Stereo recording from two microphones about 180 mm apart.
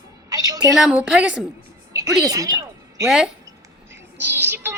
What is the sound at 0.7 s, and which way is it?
Speech, 5° right (ahead or behind).